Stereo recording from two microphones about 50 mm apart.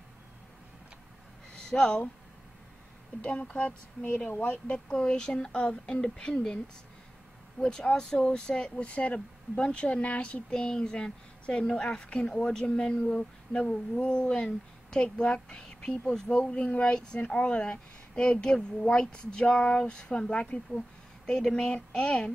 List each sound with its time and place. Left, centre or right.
1.7 s a woman's voice: left
3.2 s a woman's voice: left
7.6 s speech: centre
8.8 s a woman's voice: left
10.5 s a woman's voice: centre
16.3 s a woman's voice: left